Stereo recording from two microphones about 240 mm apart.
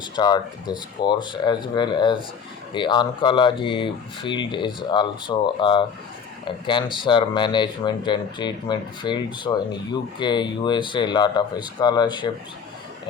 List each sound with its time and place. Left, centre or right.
0.2 s speech: centre